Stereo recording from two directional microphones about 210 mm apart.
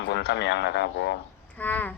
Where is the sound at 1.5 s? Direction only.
10° left (ahead or behind).